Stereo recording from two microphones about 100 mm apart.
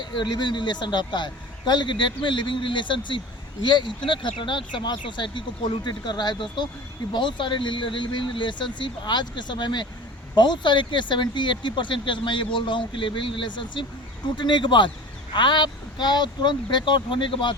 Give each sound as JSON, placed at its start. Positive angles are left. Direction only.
{"t": 0.0, "sound": "speech", "side_deg": 50}